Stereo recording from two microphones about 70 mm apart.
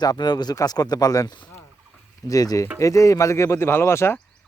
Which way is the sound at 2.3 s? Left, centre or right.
Left.